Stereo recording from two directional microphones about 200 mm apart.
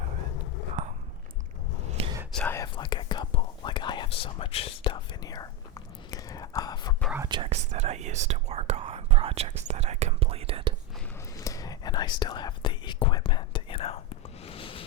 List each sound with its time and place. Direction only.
1.9 s whispering: 30° right (ahead or behind)
2.3 s whispering: 10° left (ahead or behind)
2.7 s whispering: 25° left (ahead or behind)
7.3 s whispering: 25° right (ahead or behind)
11.3 s whispering: 15° left (ahead or behind)
14.4 s a sound: 25° left (ahead or behind)